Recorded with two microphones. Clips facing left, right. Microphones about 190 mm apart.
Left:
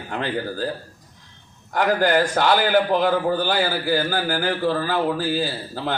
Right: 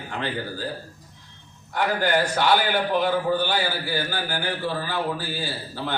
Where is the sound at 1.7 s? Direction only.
45° left (ahead or behind).